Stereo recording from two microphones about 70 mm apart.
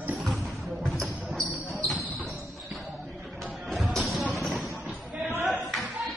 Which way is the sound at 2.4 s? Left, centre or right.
Centre.